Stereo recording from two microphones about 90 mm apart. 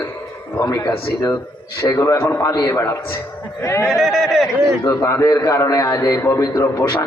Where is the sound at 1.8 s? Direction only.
30° left (ahead or behind).